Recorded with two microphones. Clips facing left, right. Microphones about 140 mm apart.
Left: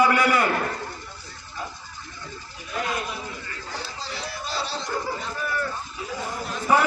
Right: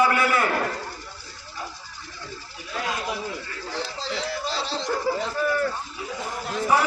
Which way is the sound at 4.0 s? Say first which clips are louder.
Right 5 dB; 90° right.